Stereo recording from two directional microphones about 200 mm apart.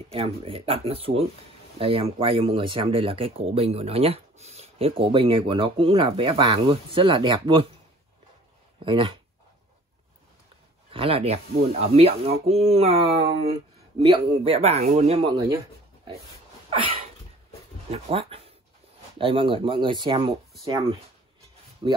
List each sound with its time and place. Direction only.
0.1 s speech: 30° right (ahead or behind)
8.8 s speech: 25° right (ahead or behind)
10.9 s speech: 30° right (ahead or behind)
16.7 s a sound: 25° right (ahead or behind)
17.9 s speech: 30° right (ahead or behind)
21.8 s speech: 25° right (ahead or behind)